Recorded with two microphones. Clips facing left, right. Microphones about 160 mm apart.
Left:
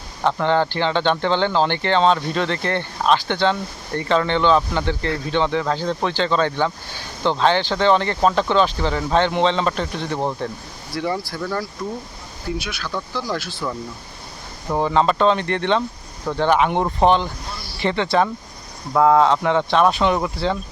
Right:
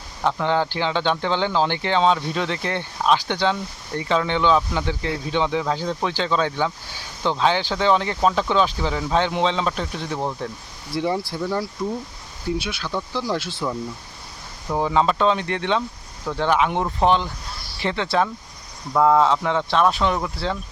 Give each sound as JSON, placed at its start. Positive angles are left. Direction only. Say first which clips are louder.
{"t": 0.3, "sound": "speech", "louder": "left 3 dB", "side_deg": -10}
{"t": 10.9, "sound": "speech", "louder": "right 1 dB", "side_deg": -15}
{"t": 12.5, "sound": "speech", "louder": "right 1 dB", "side_deg": -25}
{"t": 14.8, "sound": "speech", "louder": "left 2 dB", "side_deg": -5}